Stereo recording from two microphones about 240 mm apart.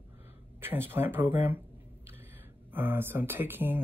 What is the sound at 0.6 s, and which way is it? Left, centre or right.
Speech, centre.